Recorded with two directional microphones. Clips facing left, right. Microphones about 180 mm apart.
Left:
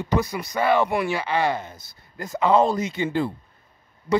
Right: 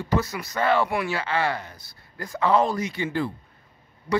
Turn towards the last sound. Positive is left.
turn(degrees=20)  # may be behind; listen again after turning